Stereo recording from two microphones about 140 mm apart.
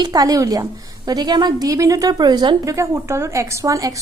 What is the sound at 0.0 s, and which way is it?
A woman's voice, 25° right (ahead or behind).